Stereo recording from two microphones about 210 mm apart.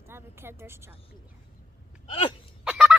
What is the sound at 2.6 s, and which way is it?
Fowl, 5° right (ahead or behind).